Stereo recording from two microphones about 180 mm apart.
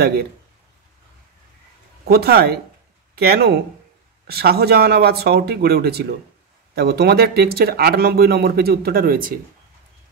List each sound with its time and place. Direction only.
2.0 s speech: 60° right (ahead or behind)